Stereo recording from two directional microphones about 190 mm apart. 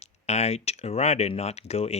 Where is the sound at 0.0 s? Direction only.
35° left (ahead or behind).